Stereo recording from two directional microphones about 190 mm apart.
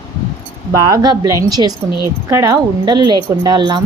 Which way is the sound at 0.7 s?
15° right (ahead or behind).